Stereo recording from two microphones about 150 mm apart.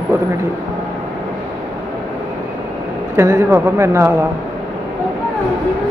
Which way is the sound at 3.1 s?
15° right (ahead or behind).